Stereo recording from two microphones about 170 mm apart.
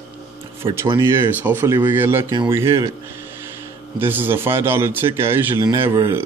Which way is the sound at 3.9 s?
10° right (ahead or behind).